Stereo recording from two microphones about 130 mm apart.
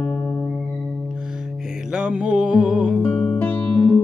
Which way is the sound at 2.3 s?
10° right (ahead or behind).